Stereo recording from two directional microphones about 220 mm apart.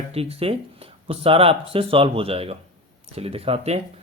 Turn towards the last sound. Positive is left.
turn(degrees=-25)  # may be behind; listen again after turning